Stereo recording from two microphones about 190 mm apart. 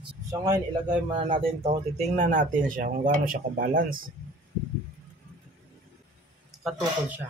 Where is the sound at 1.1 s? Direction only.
30° right (ahead or behind); by 4.1 s 50° right (ahead or behind).